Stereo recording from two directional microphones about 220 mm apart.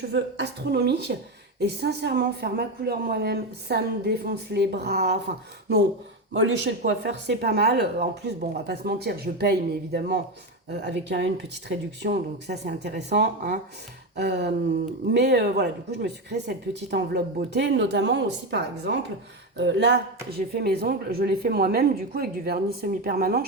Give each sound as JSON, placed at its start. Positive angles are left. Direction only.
{"t": 0.1, "sound": "speech", "side_deg": -50}
{"t": 6.3, "sound": "speech", "side_deg": -55}